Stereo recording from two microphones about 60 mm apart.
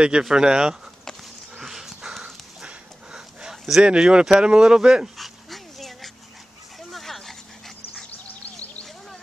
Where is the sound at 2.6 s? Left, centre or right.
Centre.